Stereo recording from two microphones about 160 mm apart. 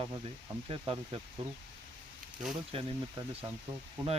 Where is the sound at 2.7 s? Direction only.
35° right (ahead or behind).